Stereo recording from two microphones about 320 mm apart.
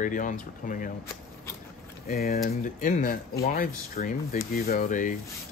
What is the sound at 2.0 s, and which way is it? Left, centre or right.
Speech, left.